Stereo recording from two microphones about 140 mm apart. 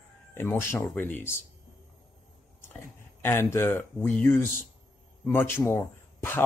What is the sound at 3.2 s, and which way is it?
Speech, 15° left (ahead or behind).